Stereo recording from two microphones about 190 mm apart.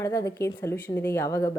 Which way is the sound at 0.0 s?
15° left (ahead or behind).